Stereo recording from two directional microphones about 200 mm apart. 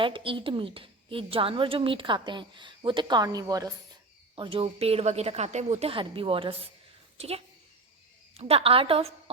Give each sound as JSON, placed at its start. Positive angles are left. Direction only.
{"t": 0.0, "sound": "a woman's voice", "side_deg": -25}